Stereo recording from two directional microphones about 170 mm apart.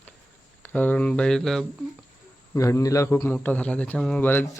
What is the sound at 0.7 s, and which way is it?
Speech, 10° left (ahead or behind).